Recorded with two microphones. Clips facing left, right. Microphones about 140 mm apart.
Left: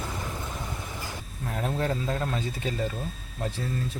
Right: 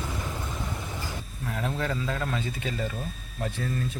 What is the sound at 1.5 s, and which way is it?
Speech, 35° left (ahead or behind).